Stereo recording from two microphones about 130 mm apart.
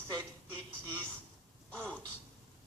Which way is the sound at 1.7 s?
10° left (ahead or behind).